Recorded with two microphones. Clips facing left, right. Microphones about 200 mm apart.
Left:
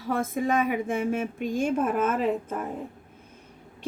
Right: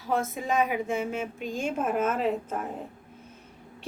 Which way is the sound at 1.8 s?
50° left (ahead or behind).